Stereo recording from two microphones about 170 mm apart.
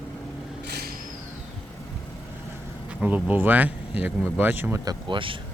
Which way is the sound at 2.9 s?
10° right (ahead or behind).